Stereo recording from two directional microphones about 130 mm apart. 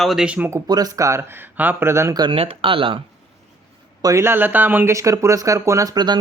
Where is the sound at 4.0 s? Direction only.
25° right (ahead or behind).